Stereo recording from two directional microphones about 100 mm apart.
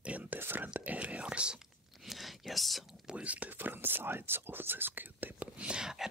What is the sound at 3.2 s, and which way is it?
Whispering, 15° right (ahead or behind).